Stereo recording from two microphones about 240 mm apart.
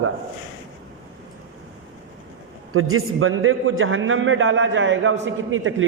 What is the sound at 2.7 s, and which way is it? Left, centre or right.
A man's voice, right.